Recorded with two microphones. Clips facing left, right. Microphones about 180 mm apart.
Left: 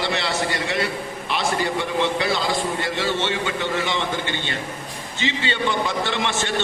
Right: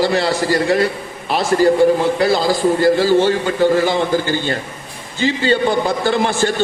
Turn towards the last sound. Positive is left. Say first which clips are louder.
# right 8 dB
turn(degrees=-40)  # may be behind; listen again after turning